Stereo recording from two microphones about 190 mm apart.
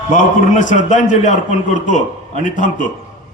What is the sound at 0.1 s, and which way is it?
A man's voice, 45° left (ahead or behind).